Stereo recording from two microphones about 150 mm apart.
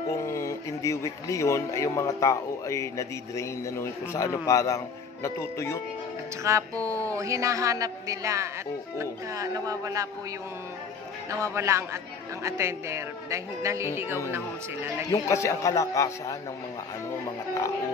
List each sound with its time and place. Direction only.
0.1 s speech: 20° left (ahead or behind)
6.5 s a woman's voice: 20° right (ahead or behind)
11.2 s a woman's voice: 20° right (ahead or behind)
15.0 s speech: 20° left (ahead or behind)